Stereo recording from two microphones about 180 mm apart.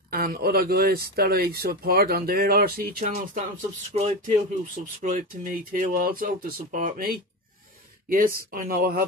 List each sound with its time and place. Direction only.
0.1 s speech: 55° right (ahead or behind)
3.9 s speech: 35° right (ahead or behind)
5.0 s speech: 50° right (ahead or behind)